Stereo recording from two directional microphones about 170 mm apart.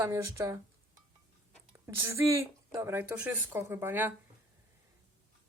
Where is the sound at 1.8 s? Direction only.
15° right (ahead or behind).